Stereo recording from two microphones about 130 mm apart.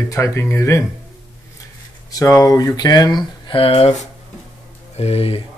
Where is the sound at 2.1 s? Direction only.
25° left (ahead or behind).